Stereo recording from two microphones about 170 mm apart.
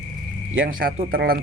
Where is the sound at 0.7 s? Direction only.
55° right (ahead or behind).